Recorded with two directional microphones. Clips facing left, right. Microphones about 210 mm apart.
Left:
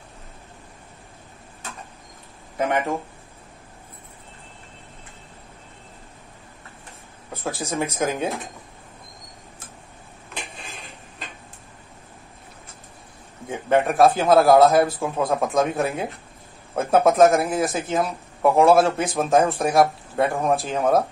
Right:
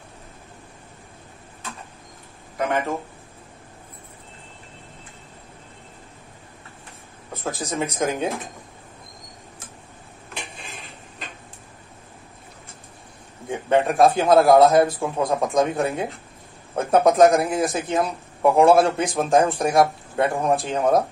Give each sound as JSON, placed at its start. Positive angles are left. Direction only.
{"t": 2.5, "sound": "speech", "side_deg": 15}
{"t": 7.7, "sound": "speech", "side_deg": 0}
{"t": 13.8, "sound": "speech", "side_deg": 0}